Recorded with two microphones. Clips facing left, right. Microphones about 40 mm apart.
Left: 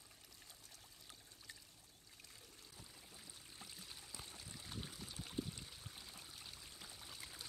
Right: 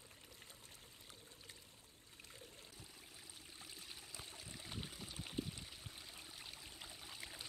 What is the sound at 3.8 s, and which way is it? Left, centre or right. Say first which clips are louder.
Trickle: right 2 dB; centre.